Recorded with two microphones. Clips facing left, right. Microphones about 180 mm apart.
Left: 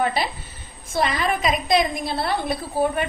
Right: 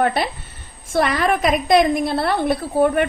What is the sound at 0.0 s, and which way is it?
A woman's voice, 60° right (ahead or behind).